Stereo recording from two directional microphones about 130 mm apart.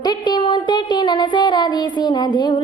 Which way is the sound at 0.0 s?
35° left (ahead or behind).